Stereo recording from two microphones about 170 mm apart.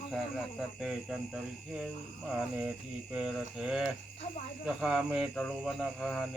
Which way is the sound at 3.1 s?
5° right (ahead or behind).